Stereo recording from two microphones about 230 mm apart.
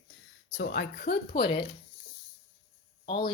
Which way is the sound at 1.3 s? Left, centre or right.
Left.